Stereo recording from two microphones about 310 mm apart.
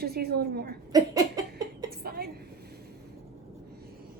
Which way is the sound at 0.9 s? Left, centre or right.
Centre.